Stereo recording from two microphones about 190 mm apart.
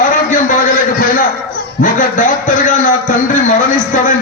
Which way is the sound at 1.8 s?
45° left (ahead or behind).